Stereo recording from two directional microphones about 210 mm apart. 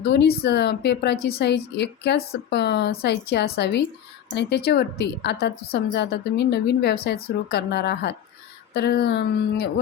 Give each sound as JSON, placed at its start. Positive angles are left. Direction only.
{"t": 0.0, "sound": "a woman's voice", "side_deg": 50}